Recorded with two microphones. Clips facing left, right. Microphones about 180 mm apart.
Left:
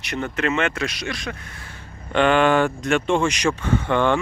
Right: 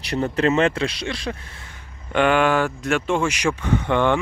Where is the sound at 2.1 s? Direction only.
10° right (ahead or behind).